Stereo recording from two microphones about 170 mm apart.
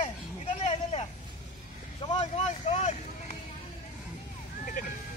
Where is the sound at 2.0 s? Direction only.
40° left (ahead or behind).